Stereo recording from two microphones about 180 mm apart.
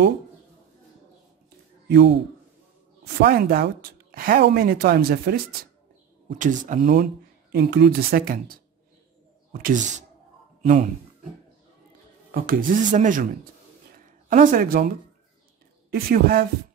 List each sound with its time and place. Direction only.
3.2 s speech: 60° right (ahead or behind)
6.3 s speech: 45° right (ahead or behind)
12.3 s speech: 55° right (ahead or behind)
13.9 s a sound: 50° right (ahead or behind)
15.9 s speech: 55° right (ahead or behind)